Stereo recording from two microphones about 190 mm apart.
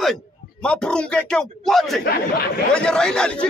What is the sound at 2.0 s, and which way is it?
Speech, 55° left (ahead or behind).